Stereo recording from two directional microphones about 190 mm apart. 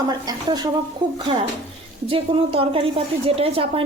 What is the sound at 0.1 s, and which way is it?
Speech, 20° right (ahead or behind).